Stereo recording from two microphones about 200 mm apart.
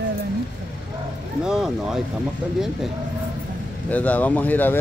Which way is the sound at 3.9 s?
10° left (ahead or behind).